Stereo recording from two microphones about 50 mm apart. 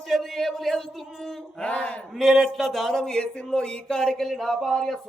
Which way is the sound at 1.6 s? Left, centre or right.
Left.